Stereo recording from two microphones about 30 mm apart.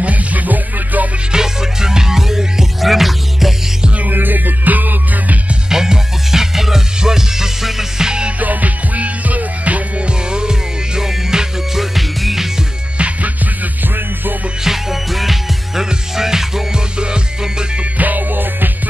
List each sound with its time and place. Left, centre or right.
0.0 s music: right
1.3 s music: centre
2.8 s music: centre
4.0 s music: right
5.7 s music: centre
8.0 s music: right
8.4 s music: right
9.9 s music: right; by 12.4 s centre
14.6 s music: centre
15.7 s music: centre
17.0 s music: right
17.9 s music: right